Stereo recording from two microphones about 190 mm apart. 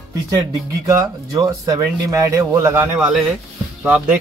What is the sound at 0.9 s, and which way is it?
Speech, 15° right (ahead or behind).